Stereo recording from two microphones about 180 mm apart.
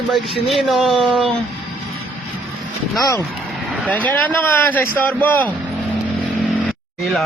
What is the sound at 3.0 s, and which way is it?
Speech, 20° left (ahead or behind).